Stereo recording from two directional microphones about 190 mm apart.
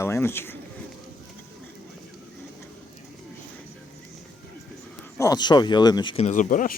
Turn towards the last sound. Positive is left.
turn(degrees=45)  # may be behind; listen again after turning